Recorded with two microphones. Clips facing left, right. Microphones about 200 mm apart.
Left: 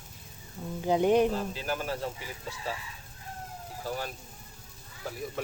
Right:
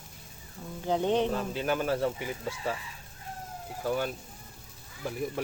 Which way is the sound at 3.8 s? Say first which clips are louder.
Right 5 dB; 60° right (ahead or behind).